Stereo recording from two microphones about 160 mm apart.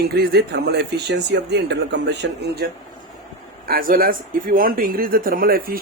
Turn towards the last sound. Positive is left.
turn(degrees=-65)  # may be behind; listen again after turning